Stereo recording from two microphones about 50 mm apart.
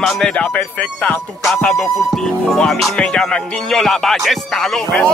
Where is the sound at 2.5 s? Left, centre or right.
Centre.